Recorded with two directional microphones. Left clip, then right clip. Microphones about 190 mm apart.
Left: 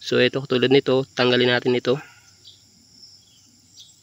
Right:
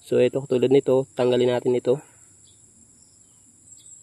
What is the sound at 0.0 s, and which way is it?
Speech, 5° right (ahead or behind).